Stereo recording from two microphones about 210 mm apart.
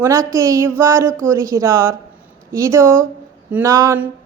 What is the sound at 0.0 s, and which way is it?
A woman's voice, 15° right (ahead or behind).